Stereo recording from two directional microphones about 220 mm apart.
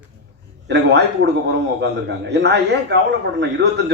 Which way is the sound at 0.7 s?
50° right (ahead or behind).